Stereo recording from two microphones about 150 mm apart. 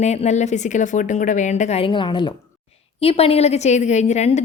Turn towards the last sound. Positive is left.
turn(degrees=50)  # may be behind; listen again after turning